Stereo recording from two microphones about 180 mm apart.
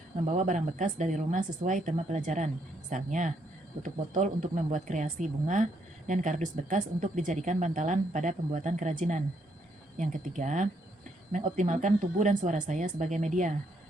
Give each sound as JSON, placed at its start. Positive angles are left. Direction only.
{"t": 0.3, "sound": "speech", "side_deg": -45}